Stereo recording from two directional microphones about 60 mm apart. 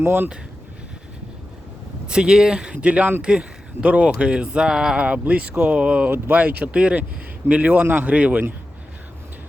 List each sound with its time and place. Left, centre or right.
0.0 s speech: right
2.0 s speech: centre
5.0 s speech: right
6.1 s speech: right